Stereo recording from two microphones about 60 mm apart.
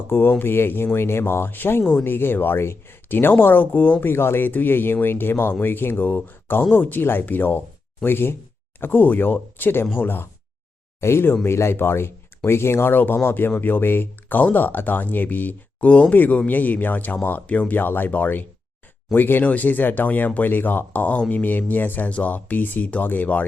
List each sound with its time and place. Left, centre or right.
0.1 s speech: left